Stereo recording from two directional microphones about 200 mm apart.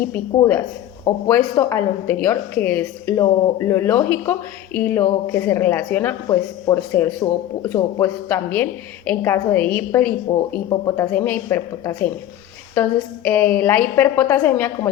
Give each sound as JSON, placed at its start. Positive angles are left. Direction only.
{"t": 1.1, "sound": "speech", "side_deg": 15}
{"t": 10.3, "sound": "speech", "side_deg": 20}